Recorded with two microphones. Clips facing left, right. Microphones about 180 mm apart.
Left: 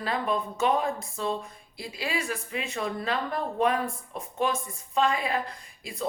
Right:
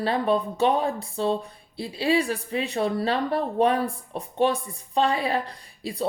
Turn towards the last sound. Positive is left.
turn(degrees=-35)  # may be behind; listen again after turning